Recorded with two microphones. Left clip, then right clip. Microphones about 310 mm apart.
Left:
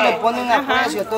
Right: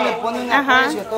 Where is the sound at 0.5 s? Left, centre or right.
Centre.